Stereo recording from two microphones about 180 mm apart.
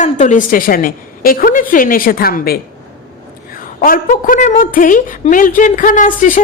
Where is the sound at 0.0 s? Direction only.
45° left (ahead or behind).